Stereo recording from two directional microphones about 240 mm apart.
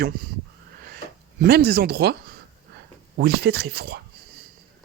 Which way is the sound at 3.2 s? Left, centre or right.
Right.